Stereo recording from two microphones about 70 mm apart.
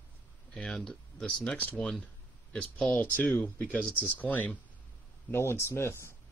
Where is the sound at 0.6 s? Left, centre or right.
Centre.